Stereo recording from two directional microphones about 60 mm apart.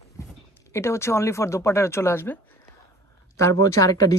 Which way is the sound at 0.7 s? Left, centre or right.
Left.